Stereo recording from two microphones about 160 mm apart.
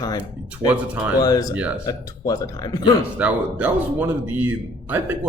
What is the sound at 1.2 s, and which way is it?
Speech, 20° left (ahead or behind).